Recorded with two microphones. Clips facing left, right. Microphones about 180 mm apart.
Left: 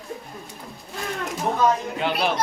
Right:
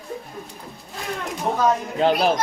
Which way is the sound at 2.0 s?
40° right (ahead or behind).